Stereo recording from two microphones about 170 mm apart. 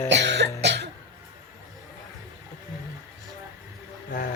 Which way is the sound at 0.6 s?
75° right (ahead or behind).